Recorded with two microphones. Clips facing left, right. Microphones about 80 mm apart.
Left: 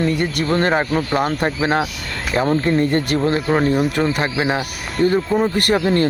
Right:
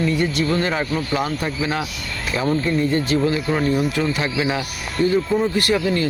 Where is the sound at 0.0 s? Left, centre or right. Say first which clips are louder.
Left 1 dB; left.